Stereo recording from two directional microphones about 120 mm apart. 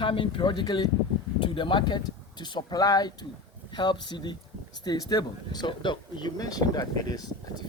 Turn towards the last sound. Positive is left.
turn(degrees=30)  # may be behind; listen again after turning